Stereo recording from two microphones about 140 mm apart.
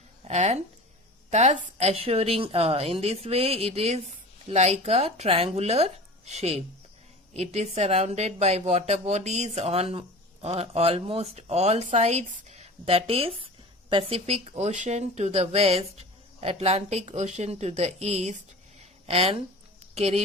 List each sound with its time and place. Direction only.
0.3 s a woman's voice: 55° right (ahead or behind)
1.9 s speech: 45° right (ahead or behind)